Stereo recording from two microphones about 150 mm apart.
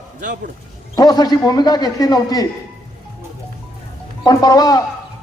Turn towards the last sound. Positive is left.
turn(degrees=25)  # may be behind; listen again after turning